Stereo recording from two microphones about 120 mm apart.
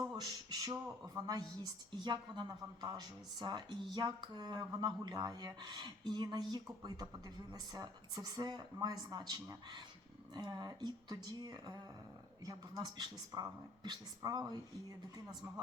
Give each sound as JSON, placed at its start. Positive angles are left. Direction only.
{"t": 0.0, "sound": "speech", "side_deg": -35}